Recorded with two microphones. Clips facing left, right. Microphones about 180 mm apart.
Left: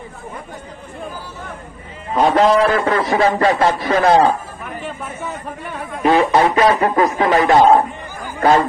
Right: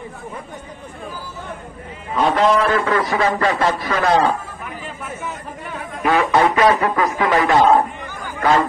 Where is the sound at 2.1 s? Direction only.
40° left (ahead or behind).